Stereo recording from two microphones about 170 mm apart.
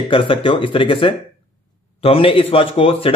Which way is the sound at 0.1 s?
30° left (ahead or behind).